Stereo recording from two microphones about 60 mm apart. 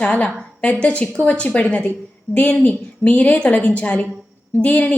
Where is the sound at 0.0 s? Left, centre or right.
Left.